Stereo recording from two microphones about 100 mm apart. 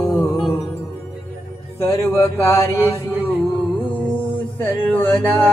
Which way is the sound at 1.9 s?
30° left (ahead or behind).